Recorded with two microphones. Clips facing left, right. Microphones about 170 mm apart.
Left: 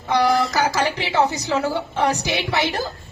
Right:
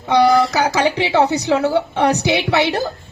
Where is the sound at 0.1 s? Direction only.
65° right (ahead or behind).